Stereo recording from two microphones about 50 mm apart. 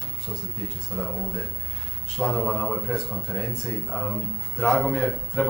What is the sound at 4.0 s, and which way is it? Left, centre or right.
Speech, centre.